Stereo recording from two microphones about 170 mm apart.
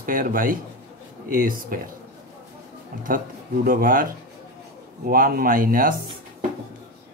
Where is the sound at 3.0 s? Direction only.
55° right (ahead or behind).